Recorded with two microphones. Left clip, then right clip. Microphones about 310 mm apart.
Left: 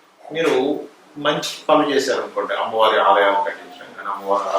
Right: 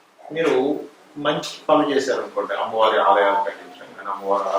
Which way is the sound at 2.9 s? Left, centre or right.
Centre.